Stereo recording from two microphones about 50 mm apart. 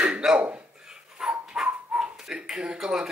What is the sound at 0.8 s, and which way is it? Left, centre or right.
Dog, centre.